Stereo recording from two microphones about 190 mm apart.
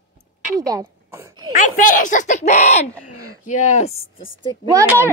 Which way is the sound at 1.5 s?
45° left (ahead or behind).